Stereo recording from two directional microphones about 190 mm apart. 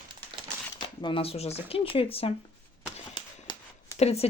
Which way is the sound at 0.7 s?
25° left (ahead or behind).